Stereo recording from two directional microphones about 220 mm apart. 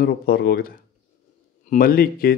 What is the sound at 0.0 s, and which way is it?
A man's voice, 45° left (ahead or behind).